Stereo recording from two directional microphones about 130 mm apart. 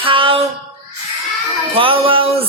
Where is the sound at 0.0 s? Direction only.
40° right (ahead or behind).